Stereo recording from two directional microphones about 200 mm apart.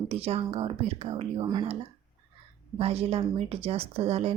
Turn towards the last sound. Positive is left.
turn(degrees=-30)  # may be behind; listen again after turning